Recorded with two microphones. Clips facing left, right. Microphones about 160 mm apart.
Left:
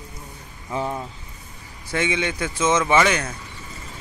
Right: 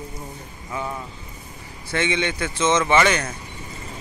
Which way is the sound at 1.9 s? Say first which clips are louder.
Even; 5° left (ahead or behind).